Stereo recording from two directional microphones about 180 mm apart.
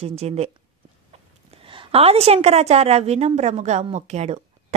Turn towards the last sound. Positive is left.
turn(degrees=-40)  # may be behind; listen again after turning